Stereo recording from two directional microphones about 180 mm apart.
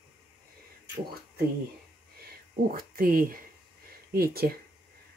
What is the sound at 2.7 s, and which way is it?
Speech, 50° right (ahead or behind).